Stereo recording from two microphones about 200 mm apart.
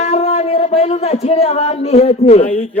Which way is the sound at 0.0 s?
30° left (ahead or behind).